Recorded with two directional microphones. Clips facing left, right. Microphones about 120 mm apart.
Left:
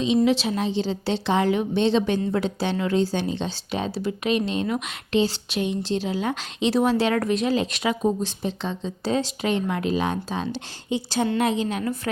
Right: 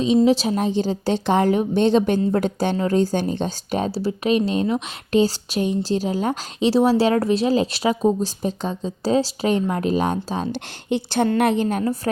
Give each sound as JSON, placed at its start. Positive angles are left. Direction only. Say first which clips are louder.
{"t": 0.3, "sound": "a woman's voice", "louder": "right 4 dB", "side_deg": -40}
{"t": 10.5, "sound": "a woman's voice", "louder": "right 4 dB", "side_deg": -60}